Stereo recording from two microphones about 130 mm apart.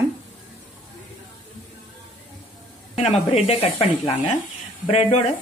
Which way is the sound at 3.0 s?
50° left (ahead or behind).